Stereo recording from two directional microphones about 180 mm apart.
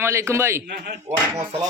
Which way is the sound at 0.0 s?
15° right (ahead or behind).